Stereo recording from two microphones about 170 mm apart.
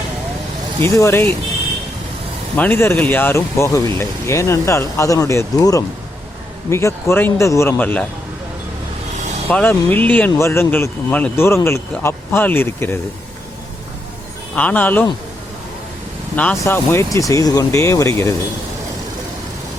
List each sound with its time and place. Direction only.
0.9 s speech: 15° left (ahead or behind)
2.6 s speech: 10° left (ahead or behind)
9.5 s speech: 10° left (ahead or behind)
14.5 s speech: 10° left (ahead or behind)
16.3 s speech: 10° left (ahead or behind)